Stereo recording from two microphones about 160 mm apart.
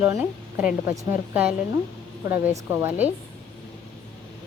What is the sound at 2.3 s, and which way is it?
Speech, 15° right (ahead or behind).